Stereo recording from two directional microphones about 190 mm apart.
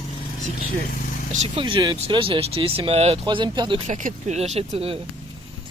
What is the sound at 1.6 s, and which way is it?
Speech, 25° right (ahead or behind).